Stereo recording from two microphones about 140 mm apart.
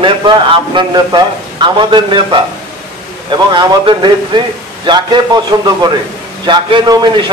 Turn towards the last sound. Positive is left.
turn(degrees=-30)  # may be behind; listen again after turning